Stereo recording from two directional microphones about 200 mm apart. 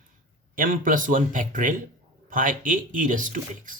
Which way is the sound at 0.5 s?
45° right (ahead or behind).